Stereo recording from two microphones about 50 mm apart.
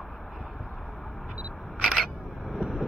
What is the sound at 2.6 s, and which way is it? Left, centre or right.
Vehicle, centre.